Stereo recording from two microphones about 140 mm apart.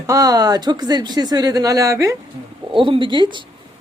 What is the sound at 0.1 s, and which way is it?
Speech, 25° right (ahead or behind).